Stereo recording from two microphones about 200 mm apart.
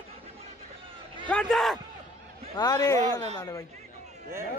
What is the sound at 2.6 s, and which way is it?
A man's voice, 20° left (ahead or behind).